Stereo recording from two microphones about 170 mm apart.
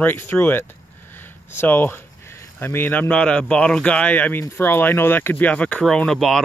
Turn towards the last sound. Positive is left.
turn(degrees=0)  # may be behind; listen again after turning